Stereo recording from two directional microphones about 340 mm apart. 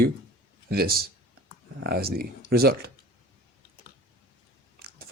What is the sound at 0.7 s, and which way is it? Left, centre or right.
Speech, right.